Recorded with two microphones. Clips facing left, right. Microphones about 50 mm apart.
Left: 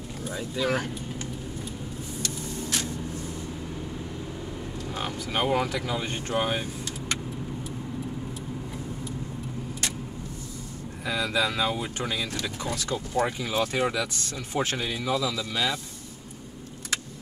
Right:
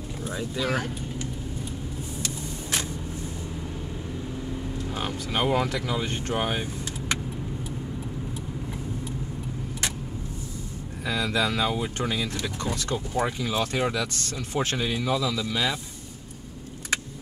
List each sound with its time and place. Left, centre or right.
0.2 s speech: centre
2.2 s vehicle: right
4.9 s speech: centre
11.1 s speech: centre
13.4 s speech: centre